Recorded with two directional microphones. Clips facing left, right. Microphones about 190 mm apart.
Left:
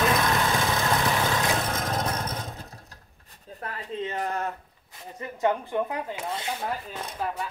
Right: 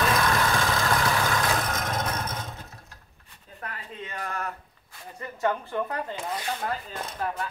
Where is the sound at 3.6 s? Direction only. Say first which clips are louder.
Left 6 dB; 25° left (ahead or behind).